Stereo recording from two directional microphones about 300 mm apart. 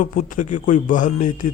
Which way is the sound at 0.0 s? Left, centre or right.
Left.